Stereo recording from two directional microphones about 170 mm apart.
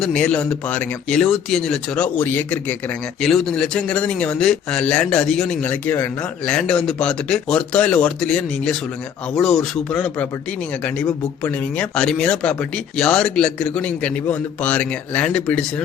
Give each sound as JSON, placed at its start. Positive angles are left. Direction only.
{"t": 0.0, "sound": "speech", "side_deg": 5}